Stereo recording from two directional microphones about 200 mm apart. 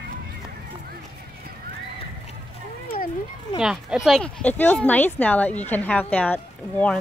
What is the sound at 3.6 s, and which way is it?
Speech, 5° right (ahead or behind).